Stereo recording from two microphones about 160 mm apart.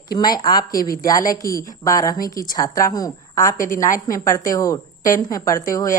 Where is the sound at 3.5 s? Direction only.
55° left (ahead or behind).